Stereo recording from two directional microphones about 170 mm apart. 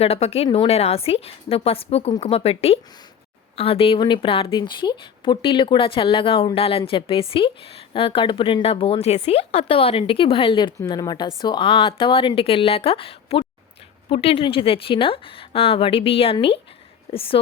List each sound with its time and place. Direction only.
0.0 s speech: 35° left (ahead or behind)